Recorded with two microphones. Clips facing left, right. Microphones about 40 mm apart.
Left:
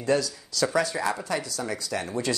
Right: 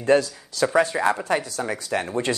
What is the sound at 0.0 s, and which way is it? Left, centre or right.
Speech, right.